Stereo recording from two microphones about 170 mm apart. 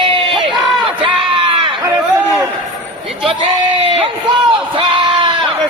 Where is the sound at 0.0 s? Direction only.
30° right (ahead or behind).